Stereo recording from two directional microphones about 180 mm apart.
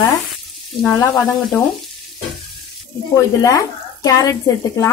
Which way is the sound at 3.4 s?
20° left (ahead or behind).